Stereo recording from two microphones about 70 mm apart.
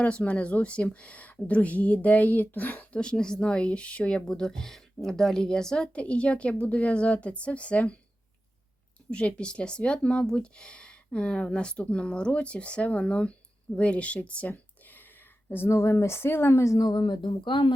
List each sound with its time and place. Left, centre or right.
0.0 s a woman's voice: centre
3.0 s speech: centre
9.0 s speech: centre; by 16.8 s left
16.8 s speech: left